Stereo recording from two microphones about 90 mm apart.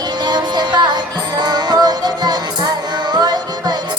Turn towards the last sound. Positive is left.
turn(degrees=-50)  # may be behind; listen again after turning